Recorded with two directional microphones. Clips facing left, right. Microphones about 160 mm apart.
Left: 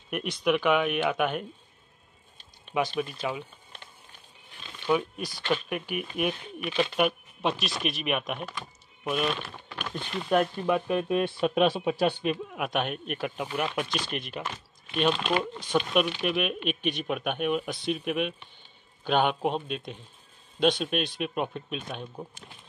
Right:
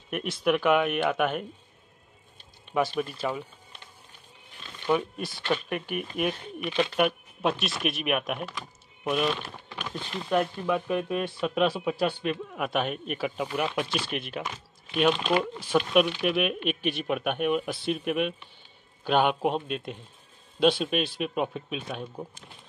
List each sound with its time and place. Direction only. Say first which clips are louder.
0.1 s speech: right 1 dB; centre (ahead or behind)
2.7 s speech: right 1 dB; centre (ahead or behind)
4.8 s speech: even; centre (ahead or behind)
9.8 s a sound: even; centre (ahead or behind)
10.6 s speech: left 1 dB; 20° left (ahead or behind)
12.5 s speech: right 1 dB; centre (ahead or behind)